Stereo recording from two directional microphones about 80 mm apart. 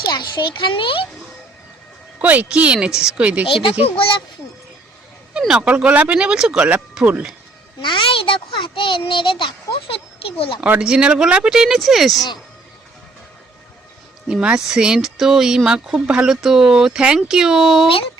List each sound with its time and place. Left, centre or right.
0.0 s a child's voice: left
2.2 s speech: centre
3.5 s a child's voice: left
5.4 s speech: centre
7.8 s a child's voice: left
10.8 s speech: centre
14.3 s speech: centre